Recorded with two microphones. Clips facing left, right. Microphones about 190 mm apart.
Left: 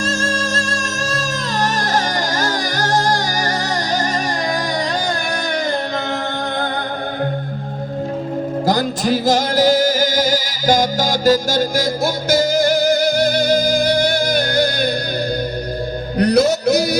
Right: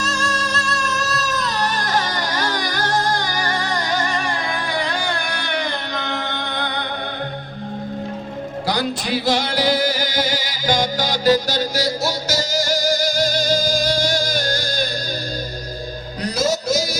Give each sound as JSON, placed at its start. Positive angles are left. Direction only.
{"t": 0.0, "sound": "music", "side_deg": 50}
{"t": 8.6, "sound": "music", "side_deg": 45}
{"t": 16.1, "sound": "music", "side_deg": 65}